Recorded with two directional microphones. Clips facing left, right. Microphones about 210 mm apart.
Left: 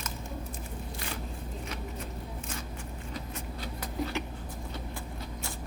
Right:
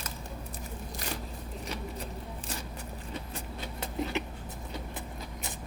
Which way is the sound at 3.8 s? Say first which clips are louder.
Right 1 dB; 20° right (ahead or behind).